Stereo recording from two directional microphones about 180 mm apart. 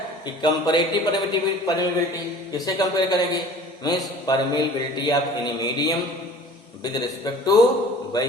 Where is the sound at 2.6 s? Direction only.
20° left (ahead or behind).